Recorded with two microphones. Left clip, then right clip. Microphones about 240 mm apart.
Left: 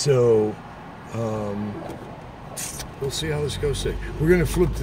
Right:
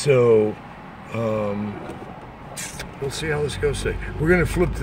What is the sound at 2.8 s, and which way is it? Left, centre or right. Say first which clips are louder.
Speech: even; centre.